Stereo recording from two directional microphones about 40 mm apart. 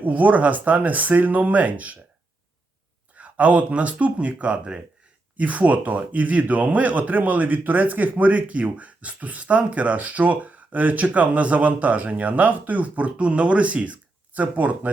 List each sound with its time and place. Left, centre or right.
0.0 s speech: right
3.2 s speech: right
5.4 s speech: right